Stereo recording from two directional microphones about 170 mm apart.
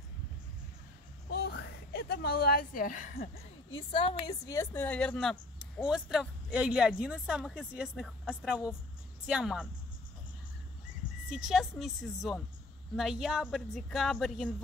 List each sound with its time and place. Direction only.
1.3 s a sound: 75° left (ahead or behind); by 3.3 s 50° left (ahead or behind)
3.9 s a woman's voice: 35° left (ahead or behind)
4.3 s speech: 20° left (ahead or behind); by 9.7 s 5° right (ahead or behind)
11.2 s speech: 5° right (ahead or behind)